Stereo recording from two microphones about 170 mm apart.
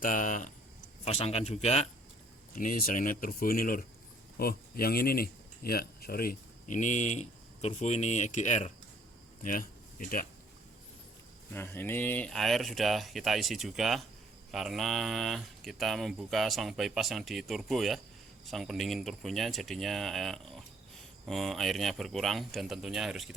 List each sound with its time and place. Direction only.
0.0 s speech: 50° left (ahead or behind)
1.0 s speech: 40° left (ahead or behind)
2.6 s speech: 50° left (ahead or behind)
11.5 s speech: 15° left (ahead or behind)